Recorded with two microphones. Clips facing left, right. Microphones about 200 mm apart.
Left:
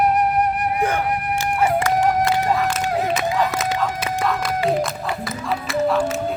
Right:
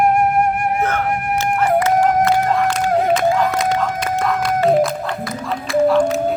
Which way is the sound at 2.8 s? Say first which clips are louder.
Right 5 dB; 50° right (ahead or behind).